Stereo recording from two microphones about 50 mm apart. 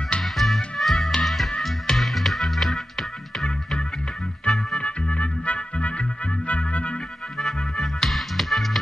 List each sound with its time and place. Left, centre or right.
0.2 s music: centre
4.7 s music: left
7.3 s music: centre